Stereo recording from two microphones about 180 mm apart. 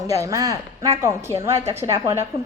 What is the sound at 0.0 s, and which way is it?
A woman's voice, 20° right (ahead or behind).